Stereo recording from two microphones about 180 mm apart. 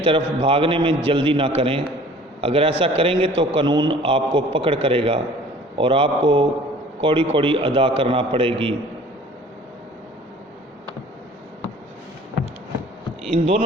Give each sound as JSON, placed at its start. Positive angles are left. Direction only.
{"t": 0.0, "sound": "a man's voice", "side_deg": -30}
{"t": 13.3, "sound": "speech", "side_deg": -35}